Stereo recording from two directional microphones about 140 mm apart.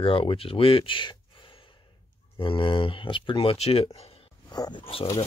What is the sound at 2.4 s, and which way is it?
Speech, 35° left (ahead or behind).